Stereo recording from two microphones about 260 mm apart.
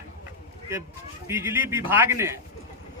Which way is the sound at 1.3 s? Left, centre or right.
Centre.